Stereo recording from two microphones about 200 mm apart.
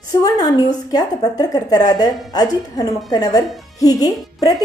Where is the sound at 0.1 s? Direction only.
20° left (ahead or behind).